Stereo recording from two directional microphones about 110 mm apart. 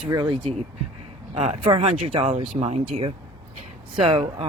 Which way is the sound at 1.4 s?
70° right (ahead or behind).